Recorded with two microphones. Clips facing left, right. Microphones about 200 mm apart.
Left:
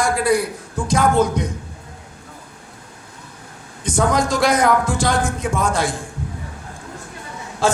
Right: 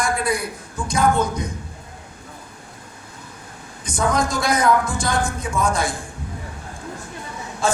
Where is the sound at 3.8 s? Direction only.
85° left.